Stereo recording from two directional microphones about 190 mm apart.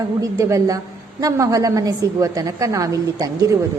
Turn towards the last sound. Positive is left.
turn(degrees=-15)  # may be behind; listen again after turning